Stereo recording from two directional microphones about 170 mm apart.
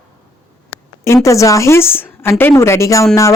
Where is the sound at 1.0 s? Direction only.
15° left (ahead or behind).